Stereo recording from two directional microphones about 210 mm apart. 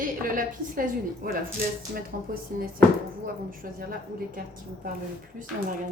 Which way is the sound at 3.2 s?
45° right (ahead or behind).